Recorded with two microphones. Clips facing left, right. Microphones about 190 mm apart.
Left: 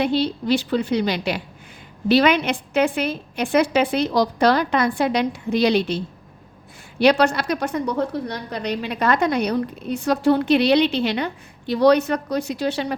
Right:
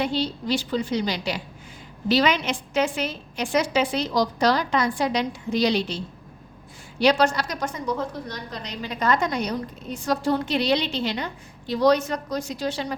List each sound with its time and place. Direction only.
0.0 s a woman's voice: 60° left (ahead or behind)
7.0 s a woman's voice: 60° left (ahead or behind)